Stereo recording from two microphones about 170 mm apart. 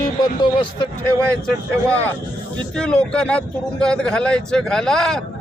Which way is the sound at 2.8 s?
5° left (ahead or behind).